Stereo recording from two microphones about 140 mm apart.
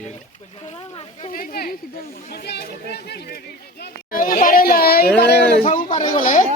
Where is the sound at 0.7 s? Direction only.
45° left (ahead or behind).